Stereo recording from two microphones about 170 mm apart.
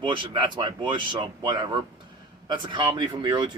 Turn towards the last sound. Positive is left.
turn(degrees=-25)  # may be behind; listen again after turning